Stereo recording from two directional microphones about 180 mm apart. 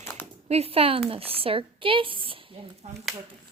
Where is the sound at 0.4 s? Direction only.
35° right (ahead or behind).